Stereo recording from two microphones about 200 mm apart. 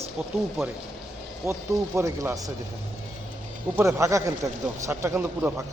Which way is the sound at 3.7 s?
15° right (ahead or behind).